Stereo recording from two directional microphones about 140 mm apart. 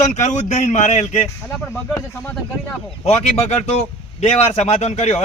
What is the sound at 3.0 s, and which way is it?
A man's voice, 50° left (ahead or behind).